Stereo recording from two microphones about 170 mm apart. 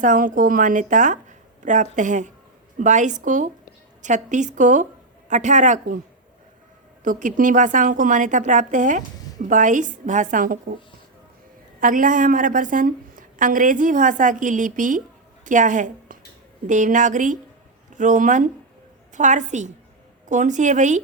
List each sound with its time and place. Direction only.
0.0 s a woman's voice: 50° right (ahead or behind)
7.0 s a woman's voice: 50° right (ahead or behind)
11.8 s a woman's voice: 50° right (ahead or behind)